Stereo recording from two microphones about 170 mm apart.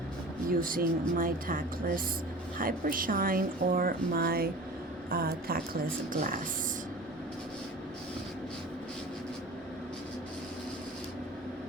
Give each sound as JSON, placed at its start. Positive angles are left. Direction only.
{"t": 0.5, "sound": "a woman's voice", "side_deg": -55}